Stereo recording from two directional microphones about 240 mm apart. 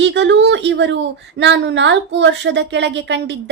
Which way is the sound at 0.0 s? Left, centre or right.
Right.